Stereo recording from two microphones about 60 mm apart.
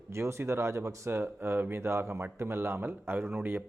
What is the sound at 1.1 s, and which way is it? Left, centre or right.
Speech, right.